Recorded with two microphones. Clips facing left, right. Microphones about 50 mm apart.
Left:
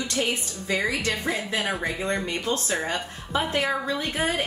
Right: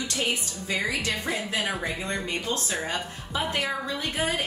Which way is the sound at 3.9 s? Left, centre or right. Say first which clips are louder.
Left 2 dB; left.